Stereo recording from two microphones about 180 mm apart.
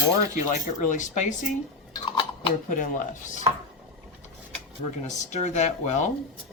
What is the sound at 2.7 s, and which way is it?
Speech, 45° left (ahead or behind).